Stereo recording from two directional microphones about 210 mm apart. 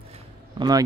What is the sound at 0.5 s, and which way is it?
Speech, 20° right (ahead or behind).